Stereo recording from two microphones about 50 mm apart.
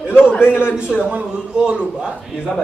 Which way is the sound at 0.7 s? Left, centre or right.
Centre.